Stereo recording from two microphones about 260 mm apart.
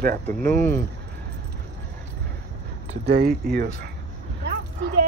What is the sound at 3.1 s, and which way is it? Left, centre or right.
Speech, right.